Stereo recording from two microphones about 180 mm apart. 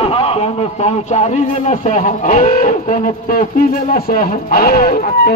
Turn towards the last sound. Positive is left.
turn(degrees=55)  # may be behind; listen again after turning